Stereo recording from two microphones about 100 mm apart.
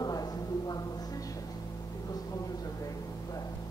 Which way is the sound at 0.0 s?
40° left (ahead or behind).